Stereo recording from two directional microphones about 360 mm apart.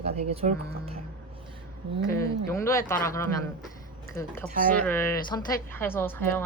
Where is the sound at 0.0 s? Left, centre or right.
Centre.